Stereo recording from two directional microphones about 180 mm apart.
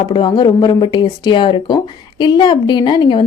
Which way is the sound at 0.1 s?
25° left (ahead or behind).